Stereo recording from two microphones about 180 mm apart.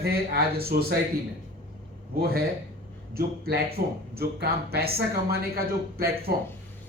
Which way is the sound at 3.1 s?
55° right (ahead or behind).